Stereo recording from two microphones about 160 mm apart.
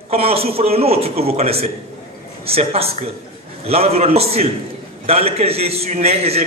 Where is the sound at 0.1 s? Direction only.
40° right (ahead or behind).